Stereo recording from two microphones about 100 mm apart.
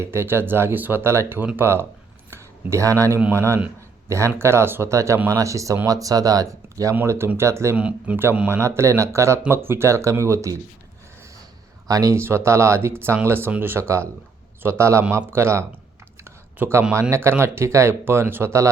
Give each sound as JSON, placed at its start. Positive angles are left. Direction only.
{"t": 0.0, "sound": "speech", "side_deg": -25}
{"t": 2.3, "sound": "a sound", "side_deg": -30}
{"t": 3.3, "sound": "speech", "side_deg": -25}
{"t": 7.8, "sound": "speech", "side_deg": -10}
{"t": 11.9, "sound": "speech", "side_deg": -35}
{"t": 16.2, "sound": "a sound", "side_deg": -25}
{"t": 16.9, "sound": "speech", "side_deg": -25}